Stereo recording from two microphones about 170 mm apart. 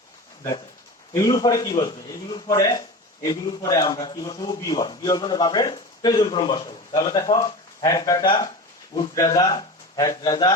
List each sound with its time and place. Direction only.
1.1 s a man's voice: 20° left (ahead or behind)